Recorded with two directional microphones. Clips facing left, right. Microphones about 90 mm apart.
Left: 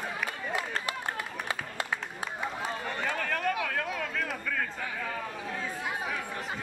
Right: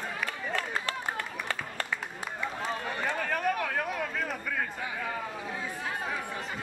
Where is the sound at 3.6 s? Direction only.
10° right (ahead or behind).